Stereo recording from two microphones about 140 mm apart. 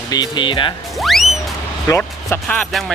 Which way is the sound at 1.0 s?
Centre (ahead or behind).